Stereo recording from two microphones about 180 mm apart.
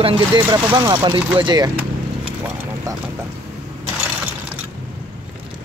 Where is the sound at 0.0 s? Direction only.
25° right (ahead or behind).